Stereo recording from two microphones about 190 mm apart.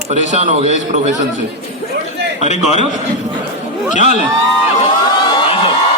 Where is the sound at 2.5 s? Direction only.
35° left (ahead or behind).